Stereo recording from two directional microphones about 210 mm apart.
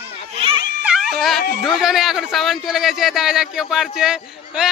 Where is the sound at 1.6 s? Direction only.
Centre (ahead or behind).